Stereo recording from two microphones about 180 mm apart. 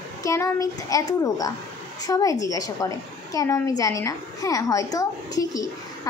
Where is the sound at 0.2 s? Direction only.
15° left (ahead or behind).